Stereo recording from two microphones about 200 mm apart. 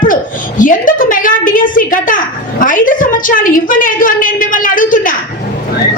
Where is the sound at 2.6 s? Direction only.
40° left (ahead or behind).